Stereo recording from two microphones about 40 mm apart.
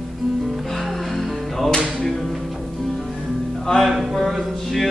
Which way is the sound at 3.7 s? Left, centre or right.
Centre.